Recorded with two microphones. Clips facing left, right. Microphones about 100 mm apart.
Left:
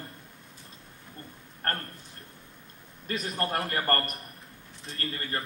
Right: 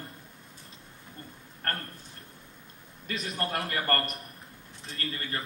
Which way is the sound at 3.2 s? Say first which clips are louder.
Left 1 dB; 30° left (ahead or behind).